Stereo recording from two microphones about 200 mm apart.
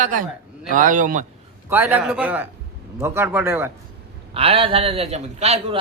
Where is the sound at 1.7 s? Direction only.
10° right (ahead or behind).